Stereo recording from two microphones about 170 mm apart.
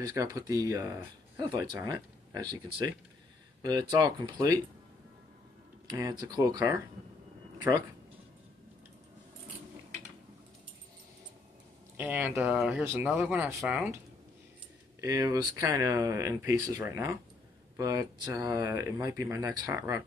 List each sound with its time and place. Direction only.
0.0 s speech: 20° right (ahead or behind)
3.9 s speech: 20° right (ahead or behind)
5.9 s speech: 20° right (ahead or behind)
12.0 s speech: 10° right (ahead or behind)
13.6 s speech: centre (ahead or behind)
15.0 s speech: 20° right (ahead or behind)